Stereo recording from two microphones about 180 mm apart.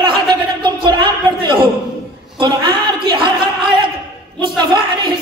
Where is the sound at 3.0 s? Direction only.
25° right (ahead or behind).